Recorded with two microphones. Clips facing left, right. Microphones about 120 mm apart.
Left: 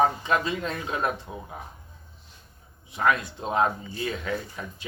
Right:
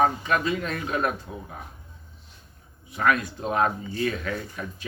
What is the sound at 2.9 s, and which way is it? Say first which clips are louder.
Speech: right 1 dB; 25° left (ahead or behind).